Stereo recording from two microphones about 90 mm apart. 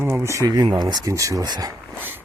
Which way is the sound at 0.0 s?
30° right (ahead or behind).